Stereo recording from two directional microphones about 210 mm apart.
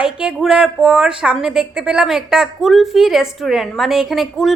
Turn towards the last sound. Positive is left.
turn(degrees=0)  # may be behind; listen again after turning